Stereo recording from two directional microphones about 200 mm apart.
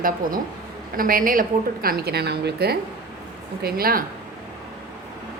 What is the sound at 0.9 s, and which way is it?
A woman's voice, 45° right (ahead or behind).